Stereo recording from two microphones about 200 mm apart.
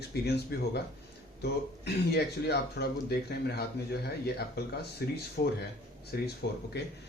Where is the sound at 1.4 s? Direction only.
55° left (ahead or behind).